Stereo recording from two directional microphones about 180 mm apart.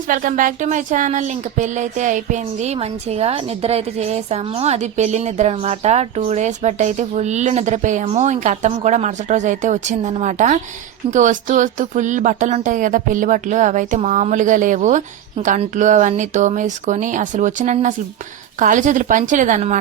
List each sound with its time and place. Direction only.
0.1 s speech: 50° right (ahead or behind)